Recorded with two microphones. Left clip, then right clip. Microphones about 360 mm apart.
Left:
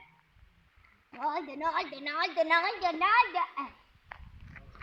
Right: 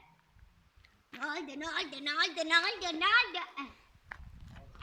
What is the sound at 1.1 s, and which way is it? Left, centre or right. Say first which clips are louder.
A woman's voice: left 5 dB; centre.